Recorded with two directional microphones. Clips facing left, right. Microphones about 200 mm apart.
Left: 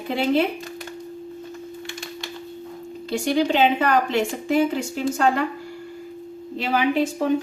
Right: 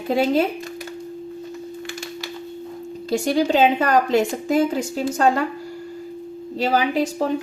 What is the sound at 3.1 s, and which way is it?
A woman's voice, 40° right (ahead or behind).